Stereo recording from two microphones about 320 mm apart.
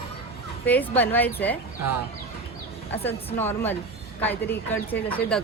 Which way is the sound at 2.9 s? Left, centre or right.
Centre.